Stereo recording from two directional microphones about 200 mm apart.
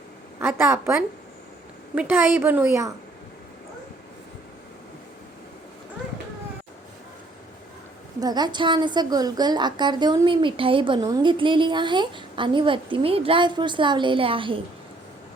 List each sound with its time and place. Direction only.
0.3 s a woman's voice: 10° right (ahead or behind)
2.0 s a woman's voice: 10° right (ahead or behind)
8.2 s a woman's voice: 20° right (ahead or behind)